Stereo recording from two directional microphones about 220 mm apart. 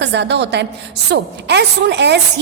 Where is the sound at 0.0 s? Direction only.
50° right (ahead or behind).